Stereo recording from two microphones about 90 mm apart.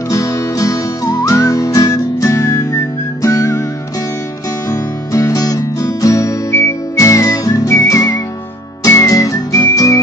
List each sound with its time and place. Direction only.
0.1 s music: 35° left (ahead or behind)
4.6 s music: 40° left (ahead or behind)